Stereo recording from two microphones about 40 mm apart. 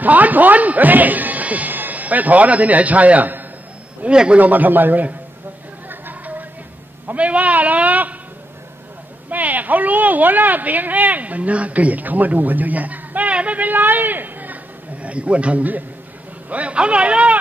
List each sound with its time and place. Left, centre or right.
0.0 s a man's voice: right
4.1 s a man's voice: right
4.4 s speech: right
5.9 s a sound: right
7.2 s a man's voice: right
9.3 s speech: right
13.7 s a man's voice: right
15.0 s a man's voice: right